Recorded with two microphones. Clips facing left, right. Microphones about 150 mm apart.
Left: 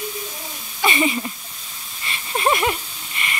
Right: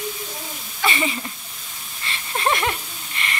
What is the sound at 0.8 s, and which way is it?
Speech, 20° left (ahead or behind).